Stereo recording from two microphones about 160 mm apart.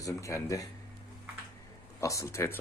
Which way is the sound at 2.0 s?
20° left (ahead or behind).